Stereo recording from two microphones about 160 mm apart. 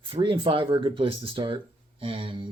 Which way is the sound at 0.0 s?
30° right (ahead or behind).